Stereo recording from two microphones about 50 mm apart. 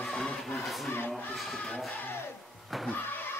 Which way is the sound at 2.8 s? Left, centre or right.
Left.